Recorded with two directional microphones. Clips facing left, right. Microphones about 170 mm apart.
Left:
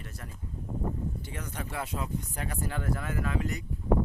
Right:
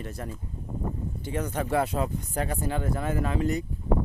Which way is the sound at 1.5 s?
55° right (ahead or behind).